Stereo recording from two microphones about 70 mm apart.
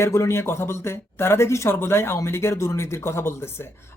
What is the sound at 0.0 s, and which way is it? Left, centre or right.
Speech, left.